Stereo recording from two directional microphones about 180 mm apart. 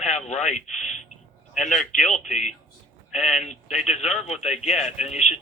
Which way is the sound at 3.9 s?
40° left (ahead or behind).